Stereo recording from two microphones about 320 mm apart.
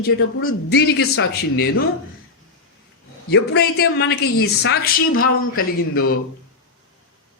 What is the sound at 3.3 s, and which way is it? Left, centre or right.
A man's voice, left.